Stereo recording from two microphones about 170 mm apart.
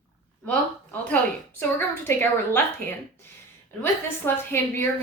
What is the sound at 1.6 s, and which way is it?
A woman's voice, 10° left (ahead or behind).